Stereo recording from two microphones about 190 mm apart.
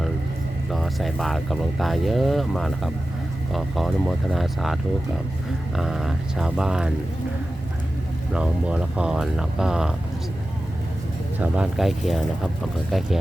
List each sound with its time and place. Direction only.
0.7 s speech: centre (ahead or behind)
8.3 s speech: 5° right (ahead or behind)
11.3 s speech: 5° right (ahead or behind)